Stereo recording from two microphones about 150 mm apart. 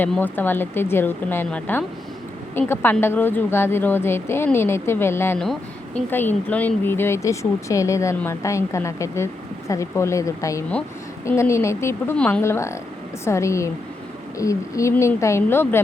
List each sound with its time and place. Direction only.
0.0 s a woman's voice: 10° left (ahead or behind)
5.4 s a woman's voice: 5° left (ahead or behind)